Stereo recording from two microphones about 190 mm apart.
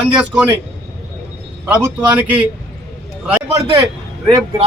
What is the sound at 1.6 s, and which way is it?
Speech, 5° right (ahead or behind).